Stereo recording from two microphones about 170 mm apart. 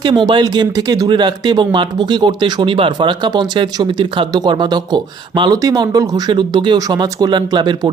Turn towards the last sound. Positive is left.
turn(degrees=-25)  # may be behind; listen again after turning